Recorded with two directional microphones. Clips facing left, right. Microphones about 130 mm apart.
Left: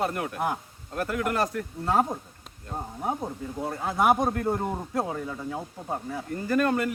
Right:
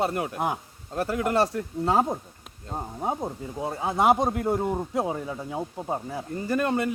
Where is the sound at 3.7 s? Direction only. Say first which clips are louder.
Right 2 dB; 20° right (ahead or behind).